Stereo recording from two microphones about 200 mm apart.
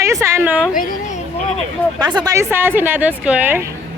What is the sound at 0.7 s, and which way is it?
Speech, 45° left (ahead or behind).